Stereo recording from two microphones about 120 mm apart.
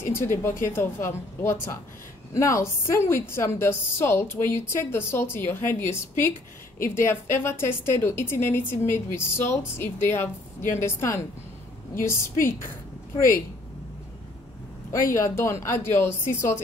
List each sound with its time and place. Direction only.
0.1 s a woman's voice: 20° left (ahead or behind)
14.9 s a woman's voice: 25° left (ahead or behind)